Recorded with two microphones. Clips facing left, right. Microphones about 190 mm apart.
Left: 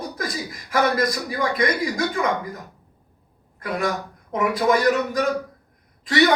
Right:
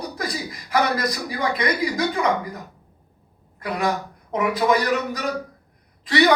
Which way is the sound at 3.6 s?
50° left (ahead or behind).